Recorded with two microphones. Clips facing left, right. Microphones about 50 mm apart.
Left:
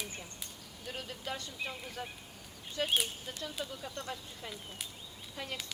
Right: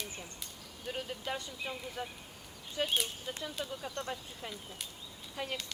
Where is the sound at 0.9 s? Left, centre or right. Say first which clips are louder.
Right 3 dB; centre.